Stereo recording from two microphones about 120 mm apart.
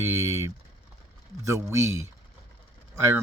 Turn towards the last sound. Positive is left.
turn(degrees=-20)  # may be behind; listen again after turning